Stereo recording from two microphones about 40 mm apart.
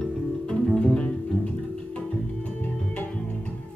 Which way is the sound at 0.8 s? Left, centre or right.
Left.